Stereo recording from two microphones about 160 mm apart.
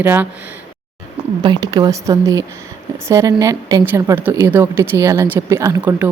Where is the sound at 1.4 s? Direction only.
25° right (ahead or behind).